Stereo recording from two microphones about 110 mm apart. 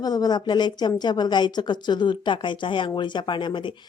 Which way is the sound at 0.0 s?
35° left (ahead or behind).